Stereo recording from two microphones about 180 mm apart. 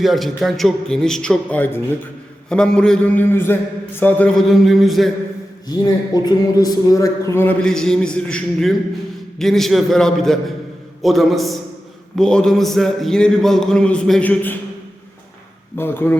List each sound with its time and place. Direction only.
0.0 s a man's voice: centre (ahead or behind)
5.6 s a man's voice: 25° left (ahead or behind)
15.8 s a man's voice: 10° left (ahead or behind)